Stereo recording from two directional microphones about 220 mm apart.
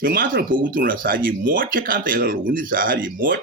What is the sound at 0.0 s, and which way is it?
Speech, 40° right (ahead or behind).